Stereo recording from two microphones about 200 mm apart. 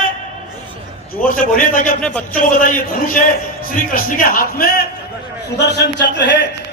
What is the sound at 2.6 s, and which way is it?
A man's voice, 45° left (ahead or behind).